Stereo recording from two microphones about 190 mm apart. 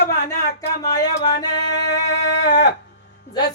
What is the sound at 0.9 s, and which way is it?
Music, 20° left (ahead or behind).